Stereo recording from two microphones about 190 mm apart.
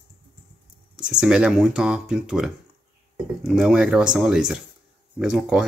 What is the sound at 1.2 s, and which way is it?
Speech, 5° right (ahead or behind).